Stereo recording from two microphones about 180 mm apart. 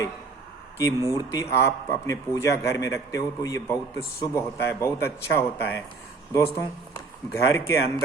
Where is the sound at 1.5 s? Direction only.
15° left (ahead or behind).